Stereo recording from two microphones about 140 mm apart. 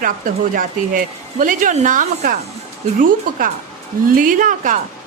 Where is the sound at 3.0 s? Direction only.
75° right (ahead or behind).